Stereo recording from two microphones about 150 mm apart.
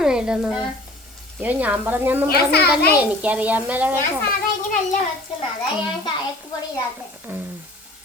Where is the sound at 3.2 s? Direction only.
10° right (ahead or behind).